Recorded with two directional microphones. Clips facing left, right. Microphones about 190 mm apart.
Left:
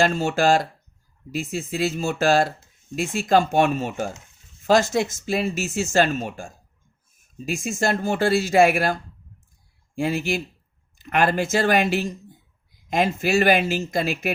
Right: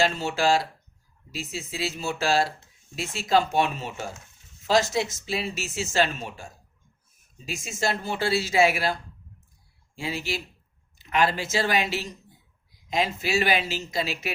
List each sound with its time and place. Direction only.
0.0 s speech: 50° left (ahead or behind)